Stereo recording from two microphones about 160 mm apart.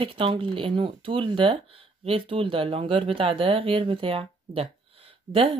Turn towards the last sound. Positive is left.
turn(degrees=-35)  # may be behind; listen again after turning